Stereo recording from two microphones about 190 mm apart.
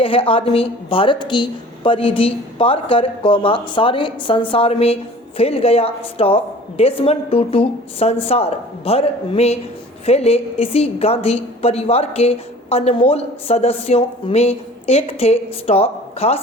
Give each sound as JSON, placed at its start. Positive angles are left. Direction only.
{"t": 0.0, "sound": "a woman's voice", "side_deg": 30}